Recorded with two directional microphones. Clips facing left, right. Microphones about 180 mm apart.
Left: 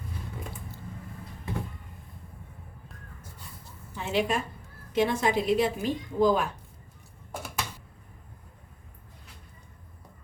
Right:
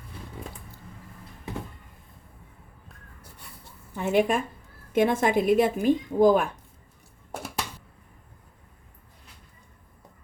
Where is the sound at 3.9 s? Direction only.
50° right (ahead or behind).